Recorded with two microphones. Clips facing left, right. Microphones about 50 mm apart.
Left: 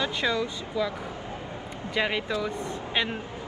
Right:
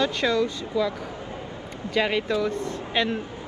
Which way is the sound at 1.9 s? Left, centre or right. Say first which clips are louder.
Right 4 dB; centre.